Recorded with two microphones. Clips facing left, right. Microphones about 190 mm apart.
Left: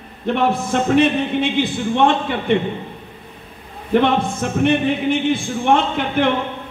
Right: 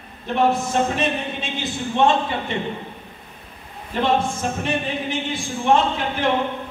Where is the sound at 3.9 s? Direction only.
60° left (ahead or behind).